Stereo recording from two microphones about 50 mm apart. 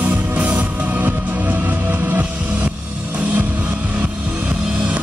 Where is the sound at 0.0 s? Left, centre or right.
Right.